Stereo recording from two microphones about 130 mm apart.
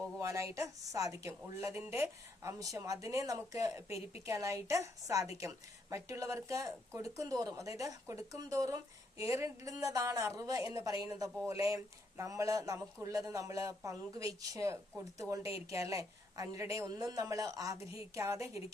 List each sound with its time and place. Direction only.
0.2 s speech: 25° right (ahead or behind)